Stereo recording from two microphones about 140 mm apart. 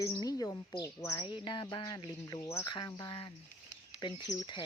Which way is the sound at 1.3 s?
35° left (ahead or behind).